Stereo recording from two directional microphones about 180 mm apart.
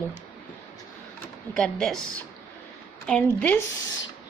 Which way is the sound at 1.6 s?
5° left (ahead or behind).